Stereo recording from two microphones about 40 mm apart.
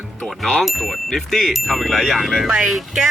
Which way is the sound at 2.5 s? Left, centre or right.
Centre.